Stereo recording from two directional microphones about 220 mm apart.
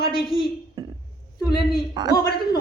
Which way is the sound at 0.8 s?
15° right (ahead or behind).